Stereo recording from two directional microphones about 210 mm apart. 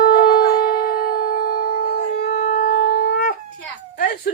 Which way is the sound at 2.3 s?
30° left (ahead or behind).